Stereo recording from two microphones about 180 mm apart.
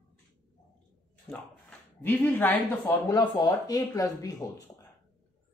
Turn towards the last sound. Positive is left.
turn(degrees=20)  # may be behind; listen again after turning